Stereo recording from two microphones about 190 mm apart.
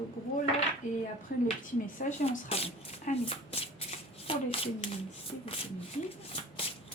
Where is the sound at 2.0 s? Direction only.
40° left (ahead or behind).